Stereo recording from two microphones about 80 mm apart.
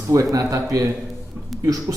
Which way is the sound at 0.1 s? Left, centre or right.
Right.